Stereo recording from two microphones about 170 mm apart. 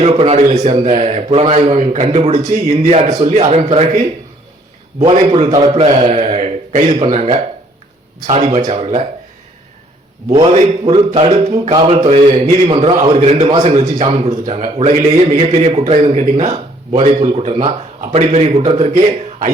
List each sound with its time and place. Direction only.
0.0 s a man's voice: 40° right (ahead or behind)
4.9 s a man's voice: 35° right (ahead or behind)
10.2 s a man's voice: 40° right (ahead or behind)